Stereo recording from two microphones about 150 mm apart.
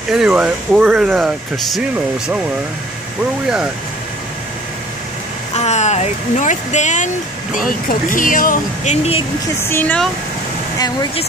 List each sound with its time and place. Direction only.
0.1 s speech: 5° right (ahead or behind)
5.6 s speech: 50° left (ahead or behind)
7.6 s speech: 65° left (ahead or behind)
9.6 s speech: 15° left (ahead or behind)